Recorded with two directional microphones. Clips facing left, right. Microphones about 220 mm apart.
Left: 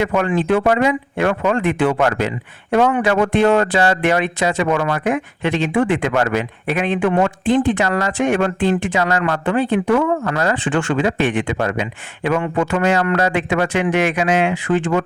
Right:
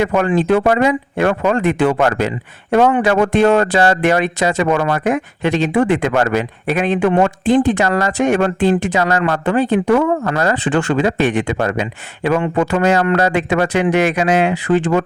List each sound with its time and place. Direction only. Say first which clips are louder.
0.0 s speech: right 3 dB; 40° right (ahead or behind)